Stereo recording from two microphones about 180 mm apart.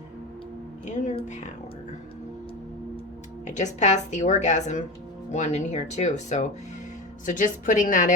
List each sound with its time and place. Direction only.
0.9 s speech: 40° left (ahead or behind)
3.4 s a woman's voice: 40° left (ahead or behind)